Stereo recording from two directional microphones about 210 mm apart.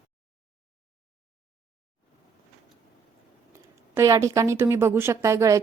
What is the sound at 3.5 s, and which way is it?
Speech, 15° right (ahead or behind).